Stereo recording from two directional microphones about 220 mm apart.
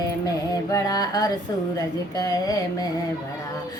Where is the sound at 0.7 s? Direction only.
15° left (ahead or behind).